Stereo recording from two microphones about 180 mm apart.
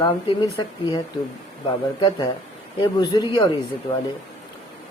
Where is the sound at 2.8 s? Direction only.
25° left (ahead or behind).